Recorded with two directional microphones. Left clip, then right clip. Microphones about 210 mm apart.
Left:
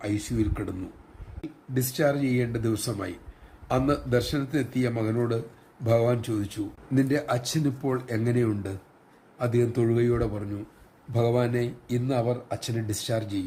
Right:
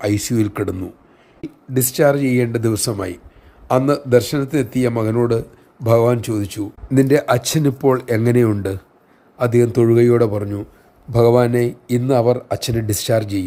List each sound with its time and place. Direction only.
0.0 s speech: 45° right (ahead or behind)